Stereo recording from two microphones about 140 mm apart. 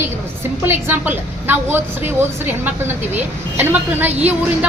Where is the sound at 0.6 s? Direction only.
15° right (ahead or behind).